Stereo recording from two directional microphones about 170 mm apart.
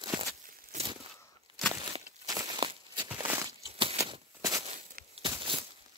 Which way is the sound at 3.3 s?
15° right (ahead or behind).